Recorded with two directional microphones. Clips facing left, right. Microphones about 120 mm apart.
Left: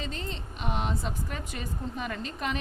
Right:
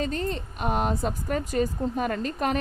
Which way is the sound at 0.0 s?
45° right (ahead or behind).